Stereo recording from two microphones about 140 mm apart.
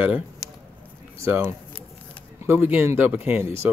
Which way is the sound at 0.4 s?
25° left (ahead or behind).